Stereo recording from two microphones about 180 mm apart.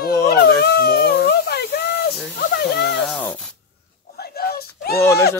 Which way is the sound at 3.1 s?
5° left (ahead or behind).